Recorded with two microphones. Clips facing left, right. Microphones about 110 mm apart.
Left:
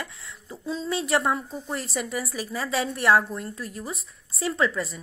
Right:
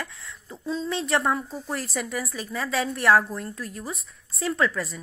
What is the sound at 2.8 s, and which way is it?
A woman's voice, centre (ahead or behind).